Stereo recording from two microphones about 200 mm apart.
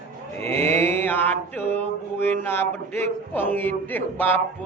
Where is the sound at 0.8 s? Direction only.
10° left (ahead or behind).